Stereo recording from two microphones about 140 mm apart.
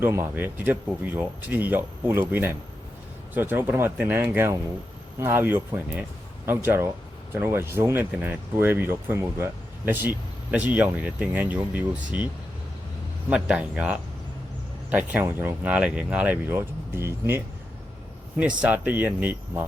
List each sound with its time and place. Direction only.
0.0 s speech: 15° right (ahead or behind)
13.3 s speech: 10° right (ahead or behind)
15.1 s speech: 15° right (ahead or behind)